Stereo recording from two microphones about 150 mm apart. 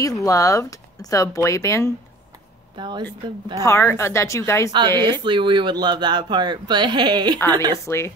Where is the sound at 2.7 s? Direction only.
30° right (ahead or behind).